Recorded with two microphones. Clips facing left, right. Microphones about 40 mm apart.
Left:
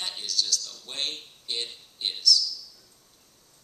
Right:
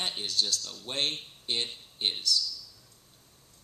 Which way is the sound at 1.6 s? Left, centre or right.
Right.